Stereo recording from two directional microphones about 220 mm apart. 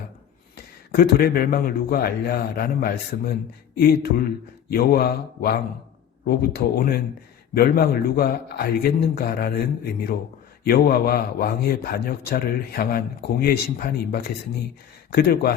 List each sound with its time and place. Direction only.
0.5 s speech: 45° left (ahead or behind)